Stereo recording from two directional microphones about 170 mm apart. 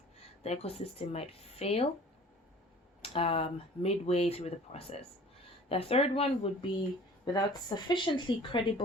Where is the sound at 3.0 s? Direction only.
35° left (ahead or behind).